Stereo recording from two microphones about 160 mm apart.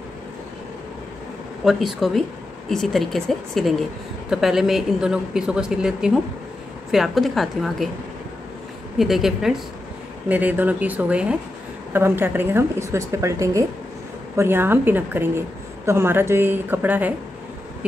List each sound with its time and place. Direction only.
1.6 s speech: centre (ahead or behind)
8.9 s a woman's voice: centre (ahead or behind)